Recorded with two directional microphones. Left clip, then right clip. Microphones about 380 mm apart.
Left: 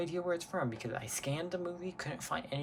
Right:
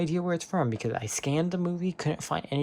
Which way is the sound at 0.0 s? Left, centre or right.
Centre.